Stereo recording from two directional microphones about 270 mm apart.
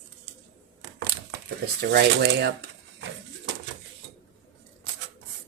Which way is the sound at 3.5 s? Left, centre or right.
Right.